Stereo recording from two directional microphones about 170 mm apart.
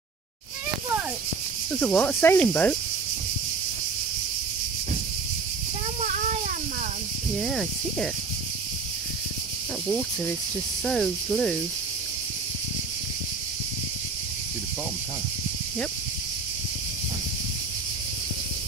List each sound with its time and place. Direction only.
1.7 s cricket: 5° left (ahead or behind)
5.9 s a sound: 45° right (ahead or behind)
7.3 s cricket: 5° left (ahead or behind)
10.9 s cricket: centre (ahead or behind)